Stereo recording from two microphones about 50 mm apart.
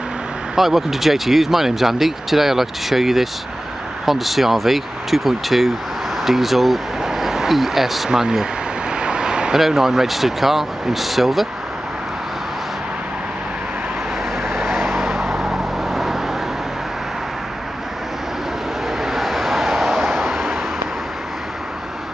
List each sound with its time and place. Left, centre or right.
0.6 s speech: centre
7.0 s vehicle: centre
8.1 s speech: centre
8.9 s vehicle: centre
9.6 s speech: centre
14.5 s vehicle: centre
18.9 s vehicle: centre